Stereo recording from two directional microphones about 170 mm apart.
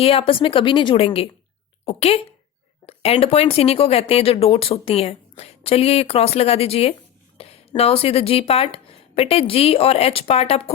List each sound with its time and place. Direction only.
0.0 s a woman's voice: 35° left (ahead or behind)